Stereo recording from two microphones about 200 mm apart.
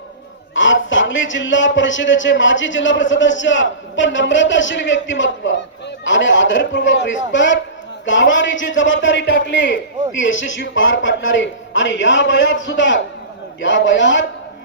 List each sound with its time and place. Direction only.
0.5 s a man's voice: 70° left (ahead or behind)